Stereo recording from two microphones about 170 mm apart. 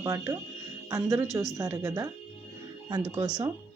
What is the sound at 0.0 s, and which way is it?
A woman's voice, 20° right (ahead or behind).